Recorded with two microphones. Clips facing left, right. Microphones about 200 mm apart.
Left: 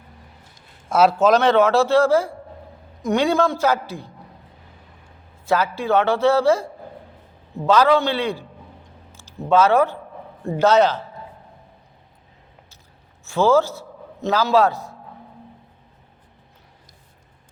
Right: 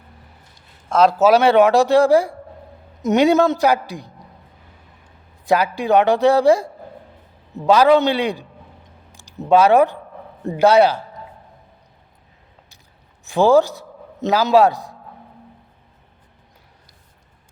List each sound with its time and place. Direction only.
0.9 s a man's voice: 5° left (ahead or behind)
1.1 s a man's voice: 10° right (ahead or behind)
5.5 s a man's voice: 15° right (ahead or behind)
7.7 s a man's voice: 15° right (ahead or behind)
13.2 s a man's voice: 15° right (ahead or behind)